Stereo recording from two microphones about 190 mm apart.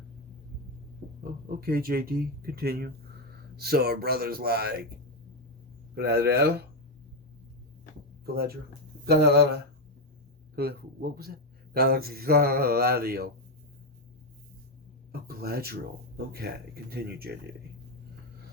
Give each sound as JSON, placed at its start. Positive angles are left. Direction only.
{"t": 1.2, "sound": "speech", "side_deg": -50}
{"t": 5.9, "sound": "speech", "side_deg": -55}
{"t": 8.2, "sound": "speech", "side_deg": -55}
{"t": 15.1, "sound": "speech", "side_deg": -55}